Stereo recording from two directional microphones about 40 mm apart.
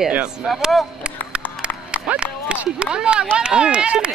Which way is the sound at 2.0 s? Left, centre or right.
Right.